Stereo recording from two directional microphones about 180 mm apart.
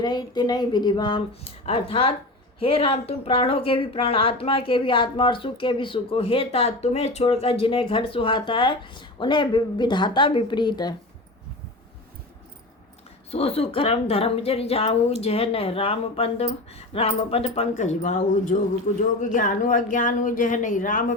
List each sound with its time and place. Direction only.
0.0 s speech: 25° left (ahead or behind)
13.3 s speech: 35° left (ahead or behind)